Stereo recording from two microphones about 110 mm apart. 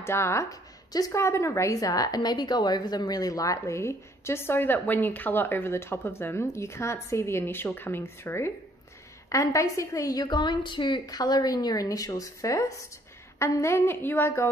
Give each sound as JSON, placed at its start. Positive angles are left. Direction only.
{"t": 0.0, "sound": "a woman's voice", "side_deg": 25}